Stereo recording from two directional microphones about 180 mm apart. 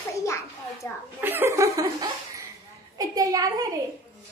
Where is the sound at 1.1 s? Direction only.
10° right (ahead or behind).